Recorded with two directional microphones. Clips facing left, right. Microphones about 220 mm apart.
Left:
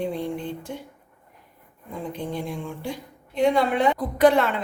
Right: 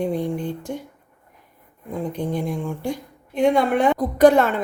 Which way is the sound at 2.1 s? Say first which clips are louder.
Right 4 dB; 45° right (ahead or behind).